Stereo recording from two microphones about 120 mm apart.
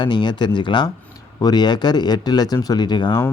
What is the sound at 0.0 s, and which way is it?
Speech, 40° left (ahead or behind).